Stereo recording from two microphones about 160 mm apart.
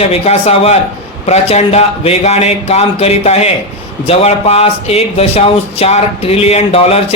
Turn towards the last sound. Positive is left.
turn(degrees=40)  # may be behind; listen again after turning